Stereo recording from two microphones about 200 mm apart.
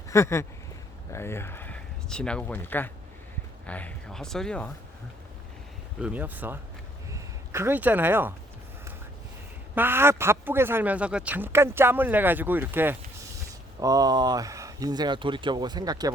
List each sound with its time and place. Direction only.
0.1 s speech: 15° left (ahead or behind)
6.0 s speech: 5° right (ahead or behind)
9.7 s speech: 10° right (ahead or behind)